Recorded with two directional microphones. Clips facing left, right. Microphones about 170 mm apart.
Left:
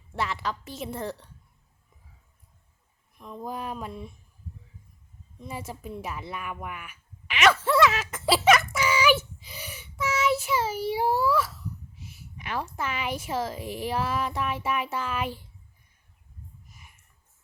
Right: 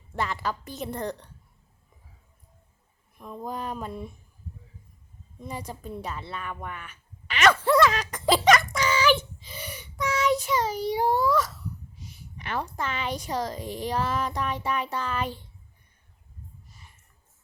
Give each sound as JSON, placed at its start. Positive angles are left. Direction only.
{"t": 0.1, "sound": "a woman's voice", "side_deg": 0}
{"t": 3.2, "sound": "a woman's voice", "side_deg": -5}
{"t": 5.4, "sound": "a woman's voice", "side_deg": 5}